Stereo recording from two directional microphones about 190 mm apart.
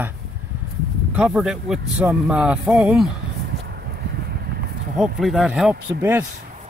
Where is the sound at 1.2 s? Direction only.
5° right (ahead or behind).